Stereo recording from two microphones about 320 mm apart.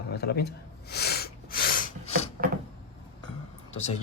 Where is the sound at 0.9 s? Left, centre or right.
Left.